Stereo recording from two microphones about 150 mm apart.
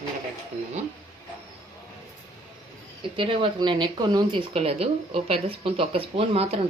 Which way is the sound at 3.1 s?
35° right (ahead or behind).